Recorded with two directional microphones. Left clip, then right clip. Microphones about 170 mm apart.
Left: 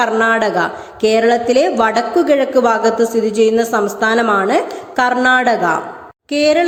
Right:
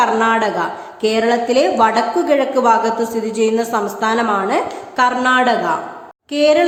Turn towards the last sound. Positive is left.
turn(degrees=20)  # may be behind; listen again after turning